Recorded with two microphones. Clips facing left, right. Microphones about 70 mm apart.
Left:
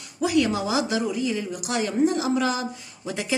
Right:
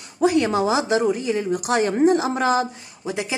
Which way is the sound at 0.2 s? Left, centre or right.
Right.